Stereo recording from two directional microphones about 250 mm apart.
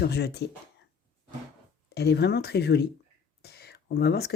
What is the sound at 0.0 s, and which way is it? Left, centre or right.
Speech, left.